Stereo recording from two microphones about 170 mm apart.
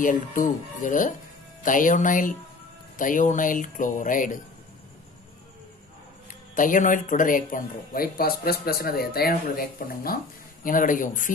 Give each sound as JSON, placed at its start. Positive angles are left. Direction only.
{"t": 0.0, "sound": "speech", "side_deg": 50}
{"t": 6.5, "sound": "speech", "side_deg": 50}